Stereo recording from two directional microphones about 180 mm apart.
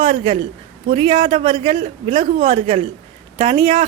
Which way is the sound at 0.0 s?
30° right (ahead or behind).